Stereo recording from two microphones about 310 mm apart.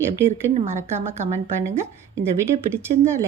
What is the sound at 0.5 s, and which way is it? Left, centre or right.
Speech, right.